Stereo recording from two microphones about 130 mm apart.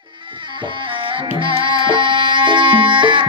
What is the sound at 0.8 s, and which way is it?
Music, 40° right (ahead or behind).